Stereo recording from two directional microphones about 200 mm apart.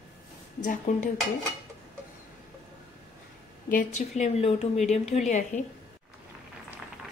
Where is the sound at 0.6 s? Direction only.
40° left (ahead or behind).